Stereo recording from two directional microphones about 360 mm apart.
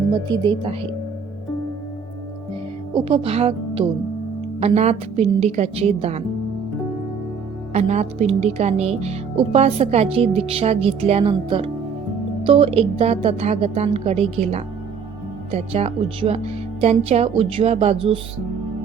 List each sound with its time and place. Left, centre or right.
0.1 s speech: centre
2.9 s speech: centre
7.7 s speech: centre